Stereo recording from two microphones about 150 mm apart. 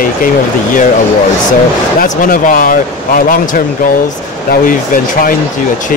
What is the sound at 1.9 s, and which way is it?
Speech, 70° left (ahead or behind).